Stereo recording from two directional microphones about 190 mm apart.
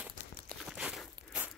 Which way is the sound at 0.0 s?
Centre (ahead or behind).